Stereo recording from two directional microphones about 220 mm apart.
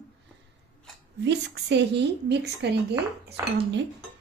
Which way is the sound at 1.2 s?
50° right (ahead or behind).